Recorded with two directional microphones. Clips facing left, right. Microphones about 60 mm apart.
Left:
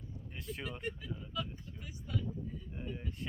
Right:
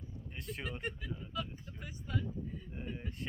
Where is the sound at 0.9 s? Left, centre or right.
Right.